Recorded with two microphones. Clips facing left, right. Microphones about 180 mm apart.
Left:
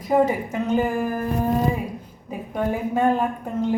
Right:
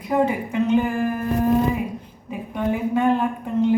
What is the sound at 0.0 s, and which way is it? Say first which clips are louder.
A woman's voice: left 1 dB; 40° left (ahead or behind).